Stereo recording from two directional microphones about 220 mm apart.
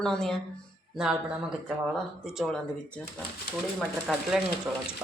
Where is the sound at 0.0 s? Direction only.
Centre (ahead or behind).